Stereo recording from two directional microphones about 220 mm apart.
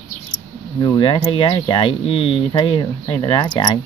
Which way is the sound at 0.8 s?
20° left (ahead or behind).